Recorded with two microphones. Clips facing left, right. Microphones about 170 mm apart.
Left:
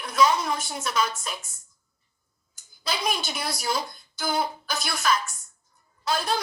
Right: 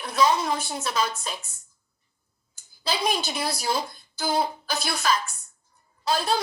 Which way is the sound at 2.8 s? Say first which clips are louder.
Right 2 dB; 30° right (ahead or behind).